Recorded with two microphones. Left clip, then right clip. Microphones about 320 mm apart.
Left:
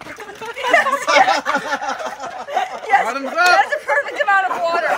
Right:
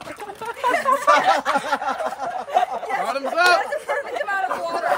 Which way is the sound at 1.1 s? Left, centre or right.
Right.